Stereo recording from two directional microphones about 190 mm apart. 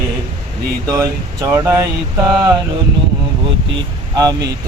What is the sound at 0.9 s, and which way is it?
Speech, 15° right (ahead or behind).